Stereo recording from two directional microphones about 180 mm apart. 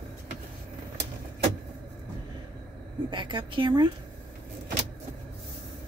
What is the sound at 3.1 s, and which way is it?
Speech, 25° right (ahead or behind).